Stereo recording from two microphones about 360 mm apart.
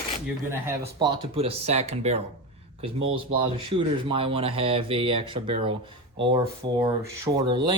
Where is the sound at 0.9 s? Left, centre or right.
Centre.